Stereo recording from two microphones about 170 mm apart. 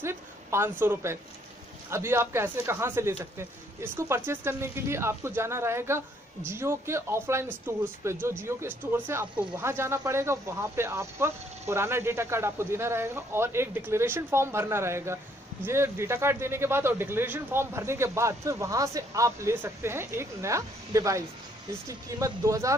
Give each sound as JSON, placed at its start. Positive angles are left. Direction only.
{"t": 0.0, "sound": "speech", "side_deg": -15}